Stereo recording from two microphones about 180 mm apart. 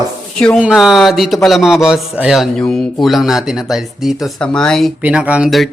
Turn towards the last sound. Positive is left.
turn(degrees=0)  # may be behind; listen again after turning